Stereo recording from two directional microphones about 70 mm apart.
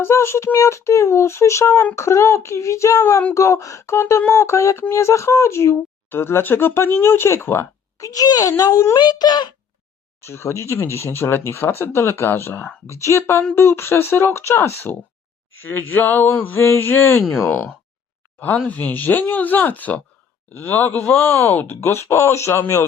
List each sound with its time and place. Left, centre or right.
0.0 s speech: left
7.9 s a woman's voice: left
8.7 s speech: left
9.0 s a child's voice: left
10.2 s speech: left
12.9 s speech: left
17.5 s speech: left